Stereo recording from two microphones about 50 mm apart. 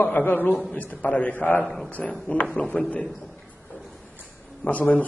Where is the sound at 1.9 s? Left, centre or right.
Left.